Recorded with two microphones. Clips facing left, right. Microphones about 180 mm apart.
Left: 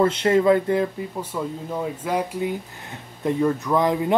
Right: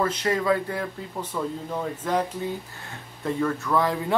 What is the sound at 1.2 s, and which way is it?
Speech, 10° left (ahead or behind).